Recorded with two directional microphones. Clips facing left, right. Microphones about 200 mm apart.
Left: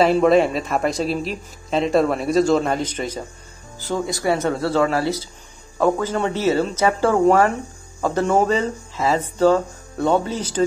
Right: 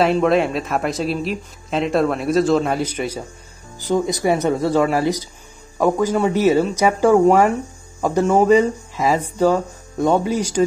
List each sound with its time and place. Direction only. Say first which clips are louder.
0.0 s speech: left 1 dB; centre (ahead or behind)